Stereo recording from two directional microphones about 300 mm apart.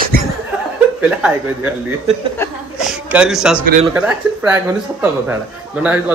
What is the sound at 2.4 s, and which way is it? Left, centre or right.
Speech, centre.